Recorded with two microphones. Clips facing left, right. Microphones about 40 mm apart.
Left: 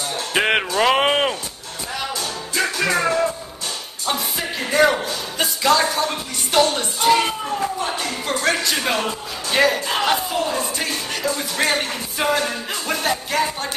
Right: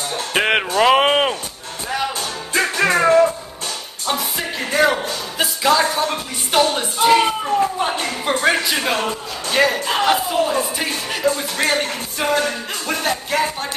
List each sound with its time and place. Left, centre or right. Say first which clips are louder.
0.3 s music: right 1 dB; centre
0.7 s speech: right 4 dB; centre
2.1 s music: right 3 dB; right
4.1 s music: right 2 dB; centre
8.3 s a man's voice: right 4 dB; right
9.5 s speech: right 1 dB; centre